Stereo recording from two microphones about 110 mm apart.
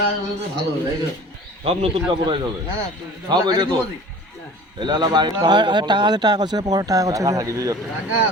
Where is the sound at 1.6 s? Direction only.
65° right (ahead or behind).